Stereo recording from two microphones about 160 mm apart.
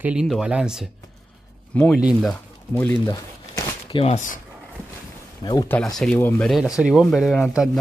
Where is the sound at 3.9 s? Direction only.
40° left (ahead or behind).